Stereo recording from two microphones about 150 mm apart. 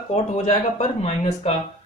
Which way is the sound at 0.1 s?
45° left (ahead or behind).